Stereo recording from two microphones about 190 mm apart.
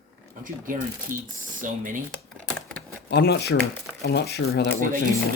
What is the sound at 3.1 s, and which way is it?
Speech, 60° left (ahead or behind).